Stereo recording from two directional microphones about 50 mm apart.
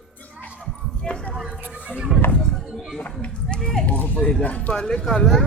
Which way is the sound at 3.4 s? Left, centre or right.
Centre.